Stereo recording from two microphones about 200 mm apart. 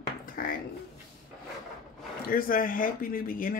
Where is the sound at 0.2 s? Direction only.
45° left (ahead or behind).